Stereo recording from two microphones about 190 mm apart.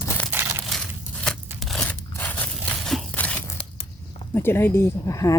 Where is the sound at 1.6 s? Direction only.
Centre (ahead or behind).